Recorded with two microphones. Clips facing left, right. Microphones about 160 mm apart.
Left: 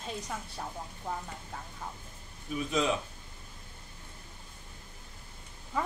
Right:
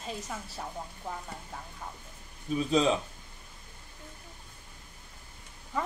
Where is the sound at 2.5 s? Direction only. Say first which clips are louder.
Right 4 dB; 30° right (ahead or behind).